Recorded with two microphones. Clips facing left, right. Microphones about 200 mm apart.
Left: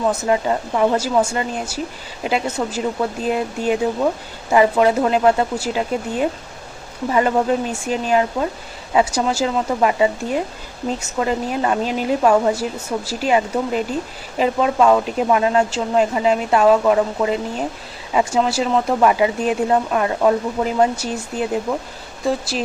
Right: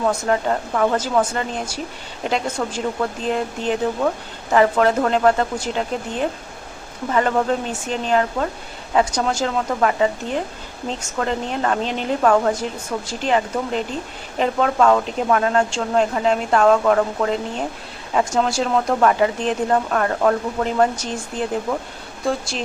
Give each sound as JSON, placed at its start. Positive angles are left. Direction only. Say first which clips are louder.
{"t": 0.0, "sound": "speech", "louder": "left 1 dB", "side_deg": 5}